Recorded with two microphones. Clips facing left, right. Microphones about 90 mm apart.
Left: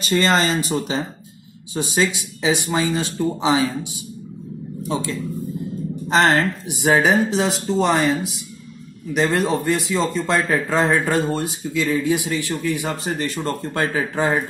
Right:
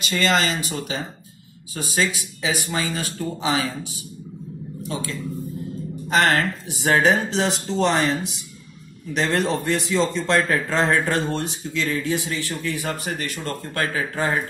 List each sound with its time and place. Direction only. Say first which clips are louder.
0.0 s speech: left 3 dB; 40° left (ahead or behind); by 3.6 s 20° left (ahead or behind)
4.8 s a woman's voice: left 5 dB; 25° left (ahead or behind)
6.7 s speech: left 2 dB; 10° left (ahead or behind)
13.0 s speech: left 4 dB; 35° left (ahead or behind)
13.7 s speech: left 2 dB; 20° left (ahead or behind)